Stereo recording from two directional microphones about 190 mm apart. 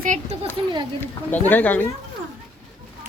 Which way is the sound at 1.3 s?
10° left (ahead or behind).